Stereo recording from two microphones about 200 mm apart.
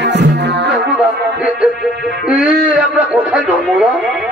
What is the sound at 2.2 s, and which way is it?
A man's voice, 5° right (ahead or behind).